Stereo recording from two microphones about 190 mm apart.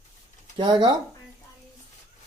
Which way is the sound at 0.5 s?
25° right (ahead or behind).